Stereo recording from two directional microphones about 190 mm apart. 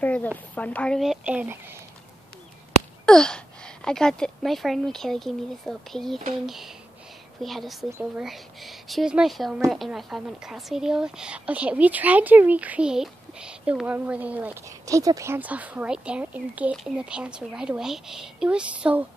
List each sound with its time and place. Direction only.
0.0 s a sound: 10° left (ahead or behind)
0.6 s a woman's voice: 5° left (ahead or behind); by 1.8 s 10° right (ahead or behind)
3.1 s a woman's voice: 5° left (ahead or behind)